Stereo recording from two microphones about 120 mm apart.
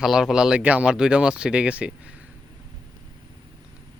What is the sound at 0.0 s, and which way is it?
Speech, 5° right (ahead or behind).